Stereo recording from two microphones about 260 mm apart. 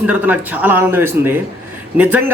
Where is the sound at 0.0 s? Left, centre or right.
Centre.